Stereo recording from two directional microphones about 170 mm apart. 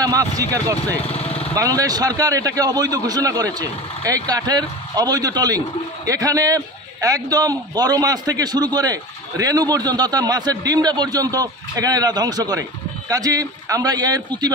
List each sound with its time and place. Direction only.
0.0 s a man's voice: 20° right (ahead or behind)
1.0 s a sound: 35° left (ahead or behind)
1.6 s a man's voice: 20° right (ahead or behind)